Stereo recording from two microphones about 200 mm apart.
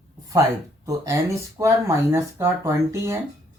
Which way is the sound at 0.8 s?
15° right (ahead or behind).